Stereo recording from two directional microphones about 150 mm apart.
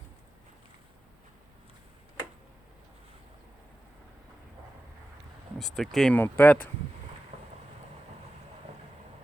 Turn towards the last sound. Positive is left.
turn(degrees=-45)  # may be behind; listen again after turning